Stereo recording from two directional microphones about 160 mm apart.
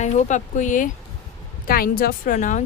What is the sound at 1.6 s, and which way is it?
Speech, 65° left (ahead or behind).